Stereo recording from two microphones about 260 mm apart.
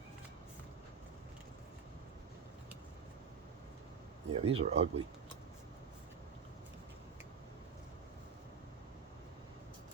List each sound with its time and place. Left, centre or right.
4.4 s speech: right